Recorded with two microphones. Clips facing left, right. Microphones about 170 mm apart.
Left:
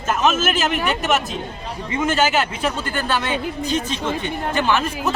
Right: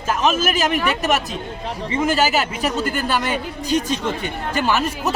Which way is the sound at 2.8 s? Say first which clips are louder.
Right 1 dB; 10° right (ahead or behind).